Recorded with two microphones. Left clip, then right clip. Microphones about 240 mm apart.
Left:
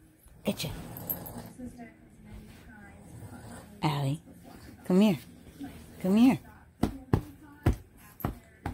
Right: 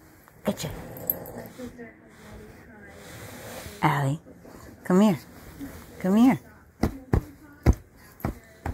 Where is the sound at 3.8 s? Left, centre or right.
Centre.